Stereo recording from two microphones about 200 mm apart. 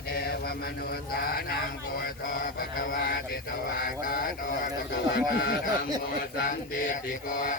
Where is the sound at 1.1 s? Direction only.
50° left (ahead or behind).